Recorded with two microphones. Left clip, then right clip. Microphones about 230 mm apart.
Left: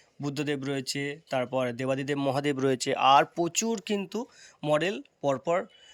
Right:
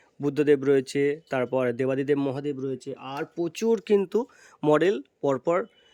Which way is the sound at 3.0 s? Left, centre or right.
Centre.